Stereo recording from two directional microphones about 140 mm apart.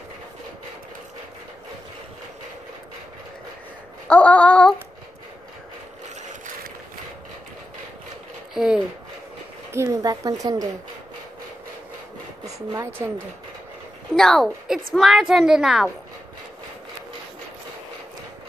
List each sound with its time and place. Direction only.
4.1 s a sound: 10° left (ahead or behind)
8.5 s a woman's voice: 5° right (ahead or behind)
9.7 s speech: 20° right (ahead or behind)
12.4 s speech: 25° right (ahead or behind)
14.1 s a woman's voice: 5° left (ahead or behind)